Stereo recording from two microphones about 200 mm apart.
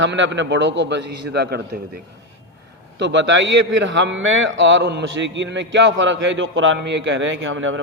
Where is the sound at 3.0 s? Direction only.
65° right (ahead or behind).